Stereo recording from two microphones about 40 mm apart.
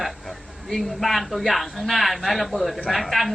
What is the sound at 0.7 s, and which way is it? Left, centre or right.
A man's voice, centre.